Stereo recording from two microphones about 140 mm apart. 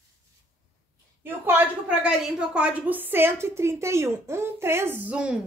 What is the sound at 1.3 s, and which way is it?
A woman's voice, 15° right (ahead or behind).